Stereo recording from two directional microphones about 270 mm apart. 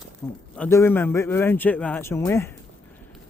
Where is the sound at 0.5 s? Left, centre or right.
Centre.